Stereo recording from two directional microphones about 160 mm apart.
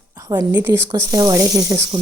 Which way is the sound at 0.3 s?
20° right (ahead or behind).